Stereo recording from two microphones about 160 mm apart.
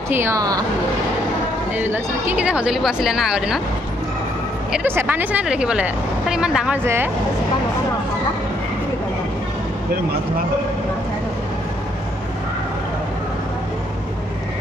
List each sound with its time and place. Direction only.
0.1 s speech: 15° right (ahead or behind)
1.9 s speech: 10° right (ahead or behind)
4.7 s speech: 15° right (ahead or behind)